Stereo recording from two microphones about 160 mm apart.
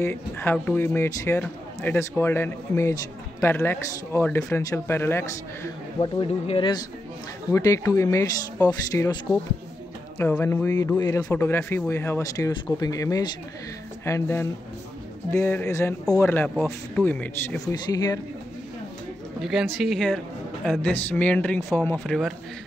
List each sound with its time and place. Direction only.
0.0 s a man's voice: 15° left (ahead or behind)
6.2 s speech: 35° left (ahead or behind)
7.5 s a man's voice: 20° left (ahead or behind)
17.8 s speech: 25° left (ahead or behind)
19.4 s a man's voice: centre (ahead or behind); by 21.9 s 15° left (ahead or behind)
21.9 s a man's voice: centre (ahead or behind)